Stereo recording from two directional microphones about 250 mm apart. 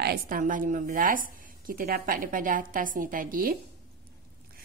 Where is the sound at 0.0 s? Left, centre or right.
Right.